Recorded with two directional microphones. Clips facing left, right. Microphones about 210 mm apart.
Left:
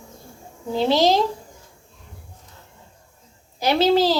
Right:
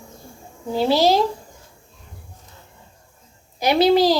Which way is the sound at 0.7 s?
5° right (ahead or behind).